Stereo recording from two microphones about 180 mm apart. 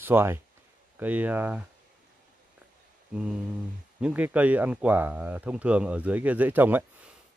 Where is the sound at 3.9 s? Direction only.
5° right (ahead or behind).